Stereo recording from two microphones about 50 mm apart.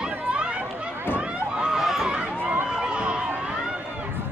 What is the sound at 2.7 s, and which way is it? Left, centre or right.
Run, centre.